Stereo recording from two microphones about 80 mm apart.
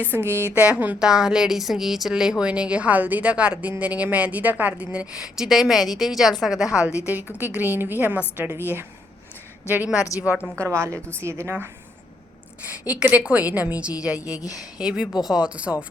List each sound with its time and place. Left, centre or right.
0.2 s a woman's voice: left
0.5 s a woman's voice: centre
7.0 s a woman's voice: right
9.6 s a woman's voice: centre
10.6 s a woman's voice: right
12.6 s speech: centre